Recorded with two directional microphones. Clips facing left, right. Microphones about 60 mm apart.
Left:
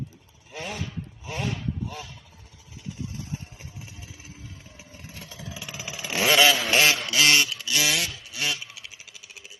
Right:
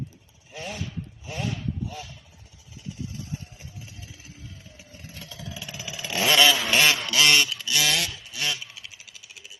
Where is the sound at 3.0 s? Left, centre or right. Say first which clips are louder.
Even; left.